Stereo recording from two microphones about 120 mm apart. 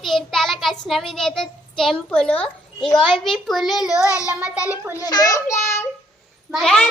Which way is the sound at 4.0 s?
25° left (ahead or behind).